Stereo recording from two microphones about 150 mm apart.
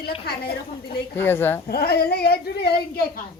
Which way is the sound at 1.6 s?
90° left.